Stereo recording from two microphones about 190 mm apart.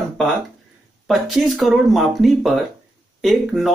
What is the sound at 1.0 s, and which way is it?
Speech, centre (ahead or behind).